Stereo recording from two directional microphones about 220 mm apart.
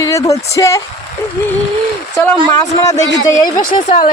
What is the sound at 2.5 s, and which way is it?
Speech, 20° left (ahead or behind).